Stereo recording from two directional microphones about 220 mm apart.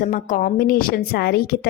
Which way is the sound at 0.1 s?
35° left (ahead or behind).